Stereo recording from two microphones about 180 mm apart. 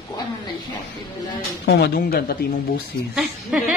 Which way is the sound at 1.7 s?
65° left (ahead or behind).